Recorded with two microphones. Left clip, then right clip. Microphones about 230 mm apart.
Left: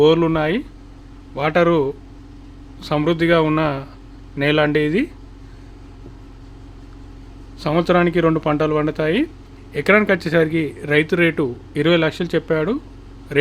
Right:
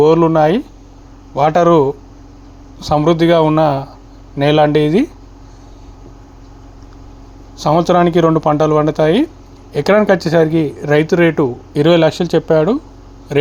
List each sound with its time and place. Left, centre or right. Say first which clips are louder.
0.0 s speech: right 5 dB; centre
7.6 s a man's voice: right 5 dB; centre